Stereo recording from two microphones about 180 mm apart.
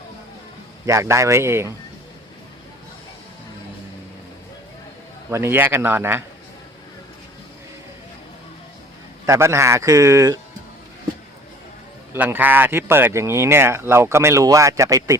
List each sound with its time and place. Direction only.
0.9 s speech: 15° right (ahead or behind)
5.3 s speech: 15° right (ahead or behind)
9.2 s speech: 15° right (ahead or behind)
12.1 s speech: 10° right (ahead or behind)